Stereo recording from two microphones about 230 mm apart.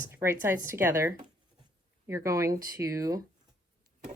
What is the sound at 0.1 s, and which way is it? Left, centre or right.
Speech, centre.